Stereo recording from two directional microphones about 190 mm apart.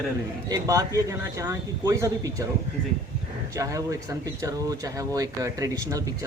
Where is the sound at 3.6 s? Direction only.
15° right (ahead or behind).